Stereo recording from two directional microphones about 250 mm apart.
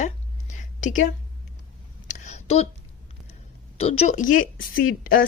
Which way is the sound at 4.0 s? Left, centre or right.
Left.